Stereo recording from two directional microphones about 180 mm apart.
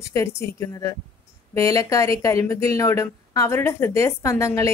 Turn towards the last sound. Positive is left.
turn(degrees=15)  # may be behind; listen again after turning